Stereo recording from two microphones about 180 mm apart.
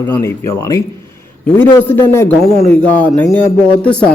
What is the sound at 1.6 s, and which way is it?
A man's voice, 10° left (ahead or behind).